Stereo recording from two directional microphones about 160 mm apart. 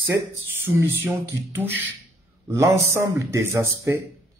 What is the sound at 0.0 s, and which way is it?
Speech, 15° right (ahead or behind).